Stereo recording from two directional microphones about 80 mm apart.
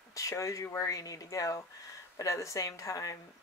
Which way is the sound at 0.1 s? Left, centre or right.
Left.